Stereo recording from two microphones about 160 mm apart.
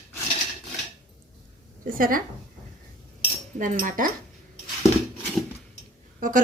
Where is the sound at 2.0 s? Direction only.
60° right (ahead or behind).